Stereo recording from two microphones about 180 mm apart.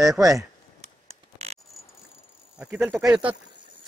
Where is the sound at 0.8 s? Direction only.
35° right (ahead or behind).